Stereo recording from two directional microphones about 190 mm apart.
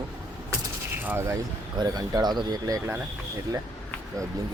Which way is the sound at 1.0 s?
10° right (ahead or behind).